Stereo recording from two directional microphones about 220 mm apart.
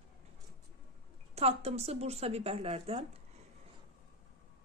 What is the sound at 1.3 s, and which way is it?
Speech, 25° right (ahead or behind).